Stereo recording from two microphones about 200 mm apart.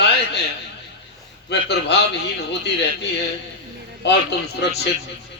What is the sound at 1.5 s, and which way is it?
Speech, 60° left (ahead or behind).